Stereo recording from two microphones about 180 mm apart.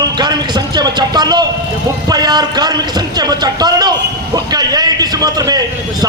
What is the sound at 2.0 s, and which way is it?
A man's voice, 20° right (ahead or behind).